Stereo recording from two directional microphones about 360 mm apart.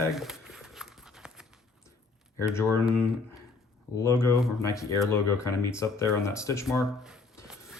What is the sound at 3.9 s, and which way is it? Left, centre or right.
Speech, centre.